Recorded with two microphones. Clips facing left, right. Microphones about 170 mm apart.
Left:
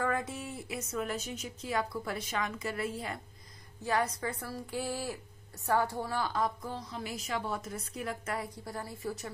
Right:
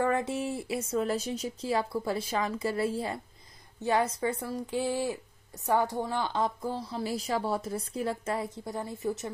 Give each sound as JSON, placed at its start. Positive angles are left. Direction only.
{"t": 0.0, "sound": "a woman's voice", "side_deg": -25}